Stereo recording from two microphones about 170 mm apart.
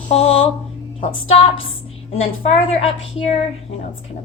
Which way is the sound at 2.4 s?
40° left (ahead or behind).